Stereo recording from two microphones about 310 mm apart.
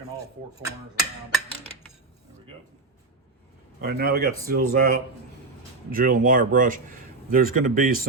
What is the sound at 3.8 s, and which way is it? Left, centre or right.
Speech, right.